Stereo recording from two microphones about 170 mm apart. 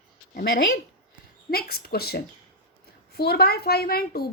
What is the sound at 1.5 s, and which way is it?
A woman's voice, 65° left (ahead or behind).